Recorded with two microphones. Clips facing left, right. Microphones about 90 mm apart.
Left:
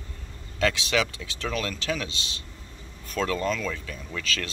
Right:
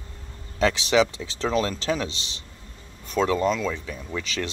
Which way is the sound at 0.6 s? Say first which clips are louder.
Right 5 dB; 20° right (ahead or behind).